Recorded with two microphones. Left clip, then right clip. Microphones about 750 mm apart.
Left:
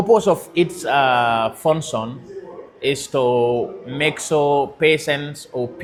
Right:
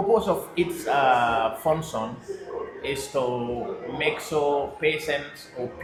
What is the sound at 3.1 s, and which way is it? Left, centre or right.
Speech, left.